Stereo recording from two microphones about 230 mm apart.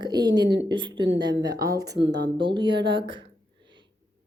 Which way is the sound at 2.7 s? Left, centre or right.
Right.